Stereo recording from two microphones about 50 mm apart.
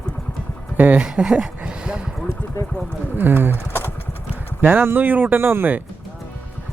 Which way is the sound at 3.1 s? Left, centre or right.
Right.